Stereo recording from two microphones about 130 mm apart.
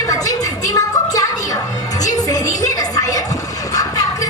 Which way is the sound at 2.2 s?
30° left (ahead or behind).